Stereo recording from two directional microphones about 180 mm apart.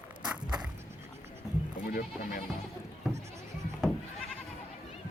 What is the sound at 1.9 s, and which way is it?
Speech, 50° left (ahead or behind).